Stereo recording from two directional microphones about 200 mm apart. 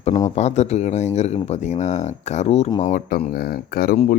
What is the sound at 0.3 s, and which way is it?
Speech, 35° left (ahead or behind).